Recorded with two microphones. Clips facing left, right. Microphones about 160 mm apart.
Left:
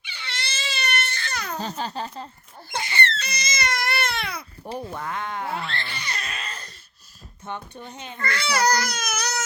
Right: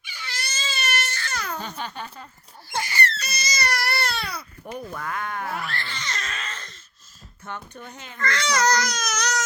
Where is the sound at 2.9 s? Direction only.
25° left (ahead or behind).